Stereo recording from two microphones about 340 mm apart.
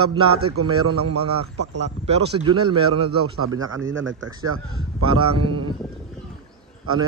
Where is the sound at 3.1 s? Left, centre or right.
Right.